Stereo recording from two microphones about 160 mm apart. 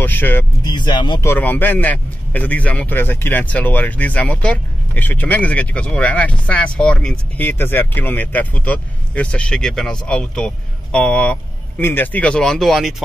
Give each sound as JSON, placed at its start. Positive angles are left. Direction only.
{"t": 0.0, "sound": "a man's voice", "side_deg": 10}
{"t": 0.7, "sound": "speech", "side_deg": 30}
{"t": 1.2, "sound": "a man's voice", "side_deg": 15}